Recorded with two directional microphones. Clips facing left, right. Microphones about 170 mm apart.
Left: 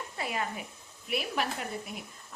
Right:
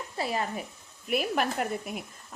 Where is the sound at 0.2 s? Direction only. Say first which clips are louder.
Right 4 dB; 35° right (ahead or behind).